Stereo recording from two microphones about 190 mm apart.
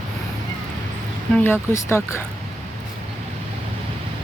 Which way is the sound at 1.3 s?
10° left (ahead or behind).